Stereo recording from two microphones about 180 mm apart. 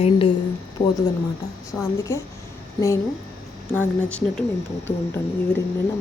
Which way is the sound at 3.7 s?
5° left (ahead or behind).